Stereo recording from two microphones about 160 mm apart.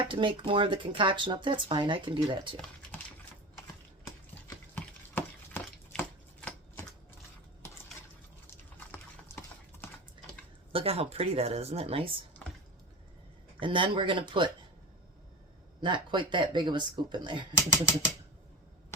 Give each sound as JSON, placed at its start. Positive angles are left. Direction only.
{"t": 0.0, "sound": "speech", "side_deg": -30}
{"t": 4.7, "sound": "chopping", "side_deg": 10}
{"t": 9.3, "sound": "typing", "side_deg": 15}
{"t": 10.7, "sound": "speech", "side_deg": -35}
{"t": 13.6, "sound": "speech", "side_deg": -30}
{"t": 15.8, "sound": "speech", "side_deg": -30}